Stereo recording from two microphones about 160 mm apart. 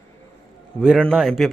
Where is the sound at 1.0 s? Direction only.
Centre (ahead or behind).